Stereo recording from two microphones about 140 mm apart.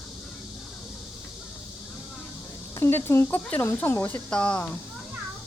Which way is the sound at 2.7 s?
20° left (ahead or behind).